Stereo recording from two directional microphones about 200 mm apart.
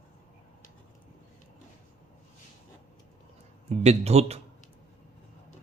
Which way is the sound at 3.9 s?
30° right (ahead or behind).